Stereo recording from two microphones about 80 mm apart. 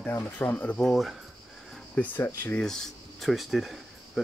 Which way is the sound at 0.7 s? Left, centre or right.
Centre.